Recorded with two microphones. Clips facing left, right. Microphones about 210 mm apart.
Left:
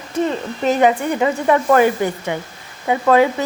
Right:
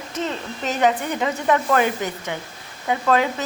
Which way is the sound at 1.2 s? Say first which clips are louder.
Left 5 dB; 10° left (ahead or behind).